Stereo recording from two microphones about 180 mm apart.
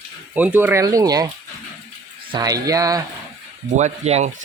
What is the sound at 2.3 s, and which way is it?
Speech, 20° right (ahead or behind).